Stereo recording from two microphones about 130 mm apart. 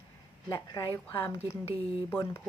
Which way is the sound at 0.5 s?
35° left (ahead or behind).